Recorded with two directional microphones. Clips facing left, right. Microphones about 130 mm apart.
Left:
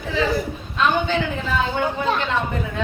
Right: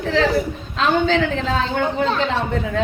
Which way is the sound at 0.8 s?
90° right.